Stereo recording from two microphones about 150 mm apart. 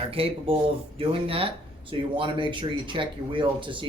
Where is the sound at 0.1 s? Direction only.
40° right (ahead or behind).